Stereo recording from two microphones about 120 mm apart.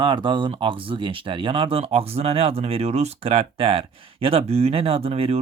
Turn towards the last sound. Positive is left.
turn(degrees=-55)  # may be behind; listen again after turning